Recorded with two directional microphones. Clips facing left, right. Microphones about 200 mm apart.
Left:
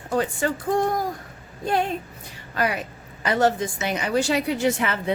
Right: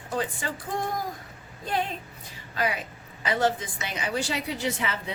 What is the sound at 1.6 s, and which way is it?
A woman's voice, 50° left (ahead or behind).